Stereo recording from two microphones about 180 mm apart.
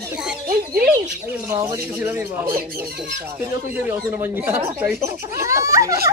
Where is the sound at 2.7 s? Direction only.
55° right (ahead or behind).